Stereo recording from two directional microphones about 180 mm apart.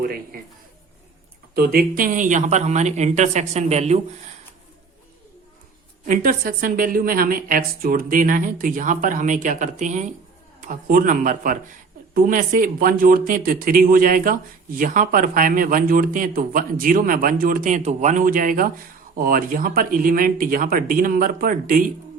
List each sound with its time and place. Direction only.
1.5 s speech: 55° right (ahead or behind); by 4.0 s 35° right (ahead or behind)
6.1 s speech: 50° right (ahead or behind)